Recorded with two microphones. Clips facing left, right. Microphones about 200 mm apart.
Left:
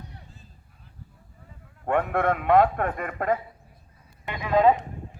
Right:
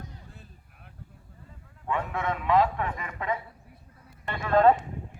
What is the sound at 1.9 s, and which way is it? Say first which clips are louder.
A man's voice: left 6 dB; 60° left (ahead or behind).